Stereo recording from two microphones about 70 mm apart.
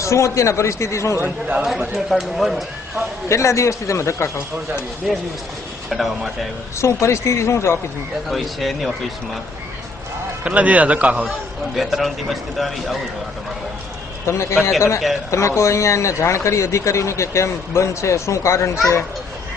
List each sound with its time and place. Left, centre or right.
0.0 s speech: left
1.2 s a man's voice: right
2.0 s speech: centre
3.2 s speech: left
5.0 s speech: centre
6.7 s speech: left
8.3 s speech: centre
10.4 s a man's voice: centre
11.7 s speech: centre
14.8 s speech: left